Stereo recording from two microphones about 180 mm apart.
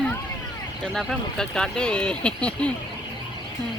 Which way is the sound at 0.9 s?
5° left (ahead or behind).